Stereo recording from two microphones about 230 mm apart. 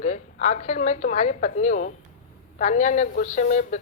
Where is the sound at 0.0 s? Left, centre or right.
Left.